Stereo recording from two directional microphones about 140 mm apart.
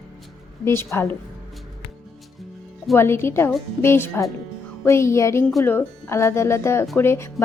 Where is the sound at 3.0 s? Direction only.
15° left (ahead or behind).